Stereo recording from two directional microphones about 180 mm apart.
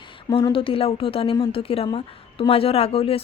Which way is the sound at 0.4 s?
30° left (ahead or behind).